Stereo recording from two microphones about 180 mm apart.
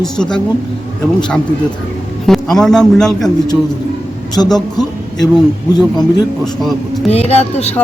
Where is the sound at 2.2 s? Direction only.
Centre (ahead or behind).